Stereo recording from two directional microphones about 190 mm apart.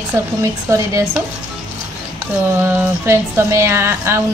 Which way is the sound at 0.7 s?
15° right (ahead or behind).